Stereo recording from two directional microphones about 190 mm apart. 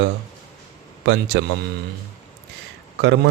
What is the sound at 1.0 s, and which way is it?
Speech, 65° right (ahead or behind).